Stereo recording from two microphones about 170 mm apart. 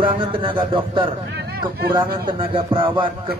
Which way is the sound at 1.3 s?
70° right (ahead or behind).